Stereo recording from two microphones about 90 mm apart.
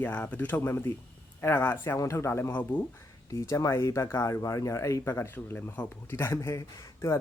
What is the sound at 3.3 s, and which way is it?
Speech, 35° left (ahead or behind).